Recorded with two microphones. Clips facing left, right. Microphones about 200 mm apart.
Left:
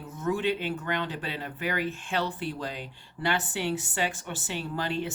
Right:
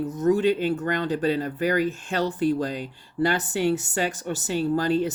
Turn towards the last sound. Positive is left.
turn(degrees=-40)  # may be behind; listen again after turning